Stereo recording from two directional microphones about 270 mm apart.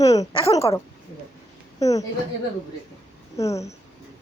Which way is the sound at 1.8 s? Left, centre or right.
Centre.